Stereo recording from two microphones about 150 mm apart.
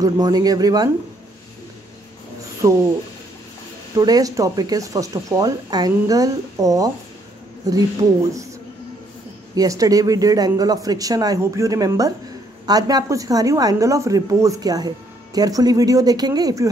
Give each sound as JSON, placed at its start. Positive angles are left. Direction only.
{"t": 0.0, "sound": "a woman's voice", "side_deg": -25}
{"t": 2.6, "sound": "a woman's voice", "side_deg": -20}
{"t": 3.9, "sound": "a woman's voice", "side_deg": -25}
{"t": 9.6, "sound": "a woman's voice", "side_deg": -25}